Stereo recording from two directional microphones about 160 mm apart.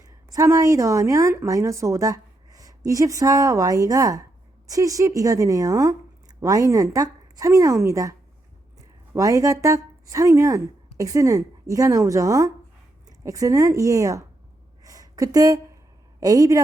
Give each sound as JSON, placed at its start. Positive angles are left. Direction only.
{"t": 0.3, "sound": "speech", "side_deg": -20}
{"t": 9.1, "sound": "speech", "side_deg": -20}
{"t": 14.8, "sound": "a sound", "side_deg": -20}
{"t": 16.2, "sound": "speech", "side_deg": -20}